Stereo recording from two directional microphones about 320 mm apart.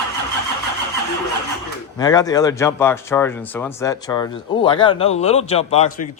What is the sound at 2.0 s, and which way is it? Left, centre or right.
Speech, centre.